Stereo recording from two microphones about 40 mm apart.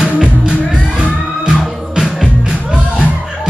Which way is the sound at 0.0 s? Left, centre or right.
Right.